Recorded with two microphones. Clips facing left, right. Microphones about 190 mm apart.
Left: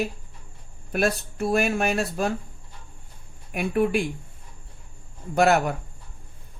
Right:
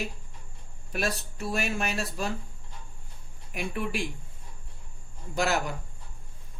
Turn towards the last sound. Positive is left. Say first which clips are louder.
# left 8 dB
turn(degrees=60)  # may be behind; listen again after turning